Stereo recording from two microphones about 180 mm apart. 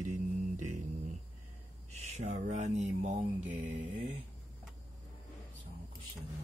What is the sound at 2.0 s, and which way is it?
Speech, 40° right (ahead or behind).